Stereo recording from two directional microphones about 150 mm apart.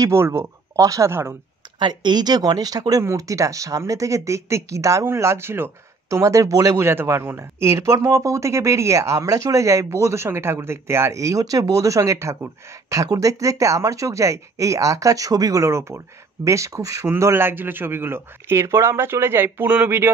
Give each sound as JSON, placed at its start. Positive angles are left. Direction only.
{"t": 0.0, "sound": "speech", "side_deg": -20}
{"t": 1.8, "sound": "a man's voice", "side_deg": -30}